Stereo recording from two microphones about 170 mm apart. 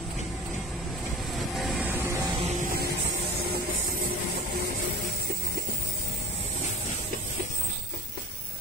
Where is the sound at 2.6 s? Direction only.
55° right (ahead or behind).